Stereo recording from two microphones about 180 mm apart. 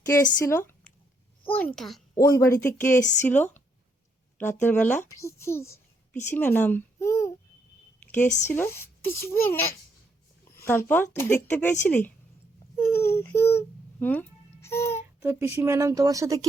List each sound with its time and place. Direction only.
0.0 s a child's voice: 15° left (ahead or behind)
2.3 s a child's voice: 15° left (ahead or behind)
3.0 s speech: 40° left (ahead or behind)
3.2 s a child's voice: 10° left (ahead or behind)
8.0 s a sound: 10° left (ahead or behind)
8.4 s a child's voice: 15° left (ahead or behind)
10.7 s a child's voice: 10° left (ahead or behind)
12.7 s baby cry: 15° left (ahead or behind)
13.1 s babbling: 15° left (ahead or behind)
15.2 s speech: 15° right (ahead or behind)